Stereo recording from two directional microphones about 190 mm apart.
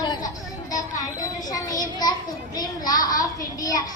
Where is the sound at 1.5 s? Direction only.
20° left (ahead or behind).